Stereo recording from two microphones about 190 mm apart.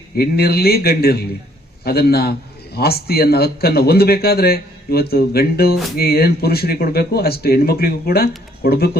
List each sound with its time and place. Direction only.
0.2 s a man's voice: 55° left (ahead or behind)